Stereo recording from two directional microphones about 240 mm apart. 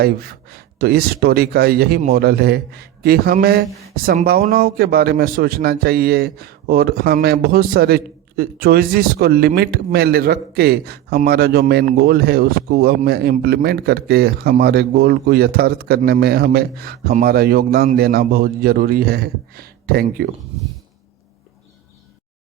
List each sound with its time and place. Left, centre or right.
0.0 s speech: right